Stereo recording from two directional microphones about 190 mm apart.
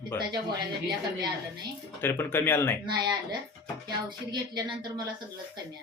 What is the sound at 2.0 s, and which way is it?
Speech, 10° left (ahead or behind).